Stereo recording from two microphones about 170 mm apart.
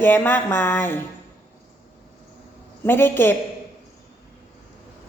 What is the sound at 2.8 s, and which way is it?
Speech, 15° left (ahead or behind).